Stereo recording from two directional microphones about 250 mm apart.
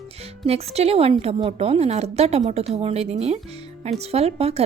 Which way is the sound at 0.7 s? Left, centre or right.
Right.